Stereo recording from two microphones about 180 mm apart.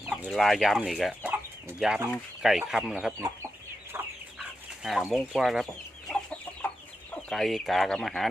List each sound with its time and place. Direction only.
0.1 s speech: centre (ahead or behind)
3.9 s chicken: 10° right (ahead or behind)
4.8 s speech: centre (ahead or behind)
6.1 s chicken: 5° left (ahead or behind)
7.2 s speech: centre (ahead or behind)